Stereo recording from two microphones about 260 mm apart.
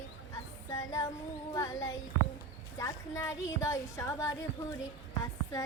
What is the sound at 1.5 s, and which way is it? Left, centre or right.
A woman's voice, centre.